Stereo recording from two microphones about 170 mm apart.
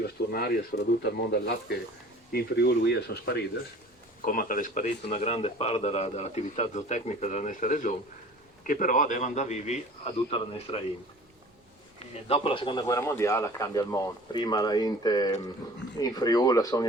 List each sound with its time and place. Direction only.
0.3 s speech: 65° left (ahead or behind)
4.3 s a man's voice: 55° left (ahead or behind); by 10.8 s 35° left (ahead or behind)
12.3 s speech: 30° left (ahead or behind)